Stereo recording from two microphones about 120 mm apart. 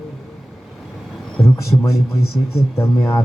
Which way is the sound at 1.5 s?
25° left (ahead or behind).